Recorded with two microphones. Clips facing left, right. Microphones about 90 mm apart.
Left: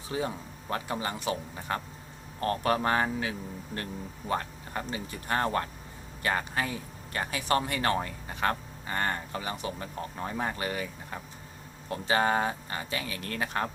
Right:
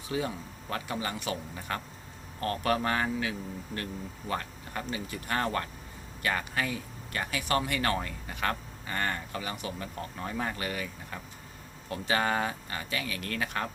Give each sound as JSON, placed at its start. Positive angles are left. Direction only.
{"t": 0.1, "sound": "speech", "side_deg": 30}